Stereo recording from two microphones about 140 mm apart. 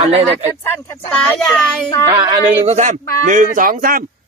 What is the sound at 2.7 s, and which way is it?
A man's voice, 55° right (ahead or behind).